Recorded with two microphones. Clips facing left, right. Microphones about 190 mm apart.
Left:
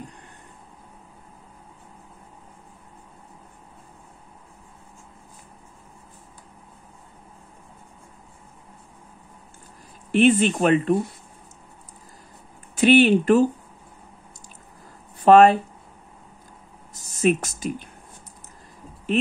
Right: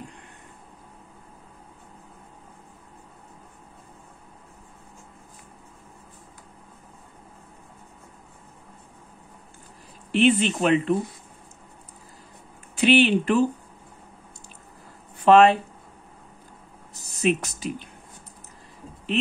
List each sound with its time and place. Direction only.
10.1 s speech: 45° left (ahead or behind)
12.7 s speech: 45° left (ahead or behind)
15.2 s speech: 40° left (ahead or behind)
17.2 s speech: 45° left (ahead or behind)